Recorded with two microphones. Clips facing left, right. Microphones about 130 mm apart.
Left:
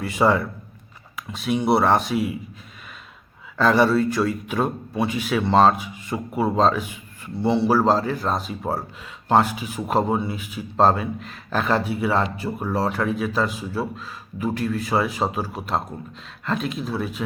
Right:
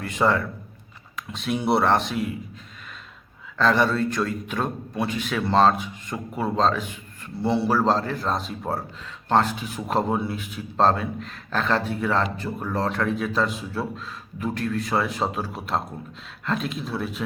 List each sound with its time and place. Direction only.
0.0 s a man's voice: 5° left (ahead or behind)
3.6 s a man's voice: 5° left (ahead or behind)